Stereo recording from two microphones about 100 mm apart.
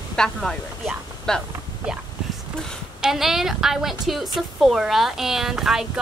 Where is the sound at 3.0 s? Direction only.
5° right (ahead or behind).